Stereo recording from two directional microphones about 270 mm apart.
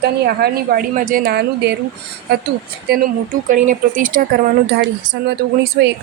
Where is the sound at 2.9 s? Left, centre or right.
Right.